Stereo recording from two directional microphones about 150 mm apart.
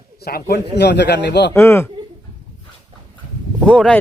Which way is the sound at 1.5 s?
20° left (ahead or behind).